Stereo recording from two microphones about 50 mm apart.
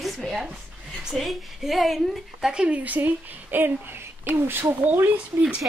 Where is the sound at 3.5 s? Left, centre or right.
Right.